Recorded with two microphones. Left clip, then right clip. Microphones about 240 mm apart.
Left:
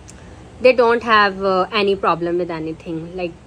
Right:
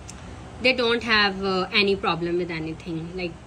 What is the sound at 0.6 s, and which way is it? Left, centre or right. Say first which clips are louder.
A woman's voice: left 8 dB; centre.